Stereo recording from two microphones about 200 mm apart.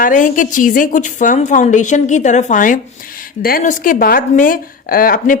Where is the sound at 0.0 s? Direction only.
40° left (ahead or behind).